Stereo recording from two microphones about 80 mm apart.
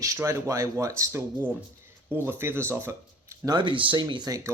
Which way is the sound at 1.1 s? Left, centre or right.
Right.